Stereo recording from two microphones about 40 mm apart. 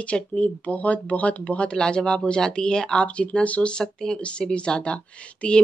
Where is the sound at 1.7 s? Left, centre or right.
Left.